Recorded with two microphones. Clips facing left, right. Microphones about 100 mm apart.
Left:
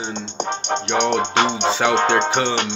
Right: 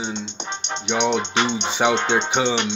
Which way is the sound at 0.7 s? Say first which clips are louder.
Left 2 dB; 50° left (ahead or behind).